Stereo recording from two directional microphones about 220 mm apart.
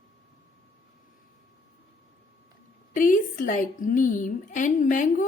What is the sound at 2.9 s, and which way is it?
A woman's voice, 40° left (ahead or behind).